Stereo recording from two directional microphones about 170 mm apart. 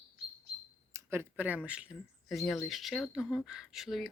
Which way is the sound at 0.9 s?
15° right (ahead or behind).